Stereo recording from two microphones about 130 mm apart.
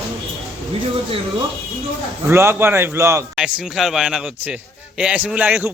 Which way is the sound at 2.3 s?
20° right (ahead or behind).